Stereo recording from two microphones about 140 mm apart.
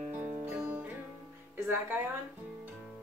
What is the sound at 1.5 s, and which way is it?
Speech, 15° right (ahead or behind).